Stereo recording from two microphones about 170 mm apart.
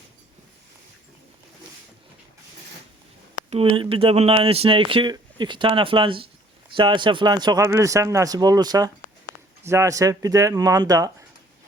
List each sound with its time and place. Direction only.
3.8 s a man's voice: 35° right (ahead or behind)